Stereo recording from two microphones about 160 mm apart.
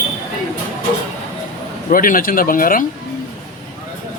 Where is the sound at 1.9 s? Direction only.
60° left (ahead or behind).